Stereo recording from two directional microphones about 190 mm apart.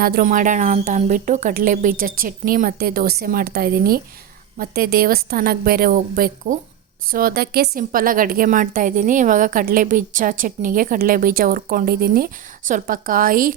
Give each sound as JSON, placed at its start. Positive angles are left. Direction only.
{"t": 0.0, "sound": "a woman's voice", "side_deg": -50}